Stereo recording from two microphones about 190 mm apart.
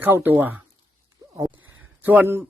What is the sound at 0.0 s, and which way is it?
Speech, 10° right (ahead or behind).